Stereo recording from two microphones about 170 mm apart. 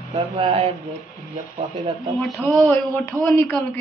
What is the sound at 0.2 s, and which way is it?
Speech, 35° right (ahead or behind).